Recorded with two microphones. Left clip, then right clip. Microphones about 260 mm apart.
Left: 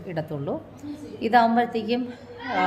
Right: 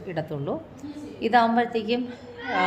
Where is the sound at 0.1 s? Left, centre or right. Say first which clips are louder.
Even; centre.